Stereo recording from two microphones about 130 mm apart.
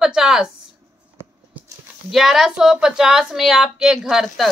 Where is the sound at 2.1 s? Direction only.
Centre (ahead or behind).